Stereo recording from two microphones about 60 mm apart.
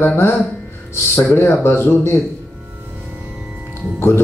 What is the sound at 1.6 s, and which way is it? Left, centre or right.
Speech, left.